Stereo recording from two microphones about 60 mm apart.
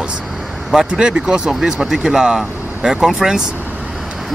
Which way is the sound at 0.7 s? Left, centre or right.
Centre.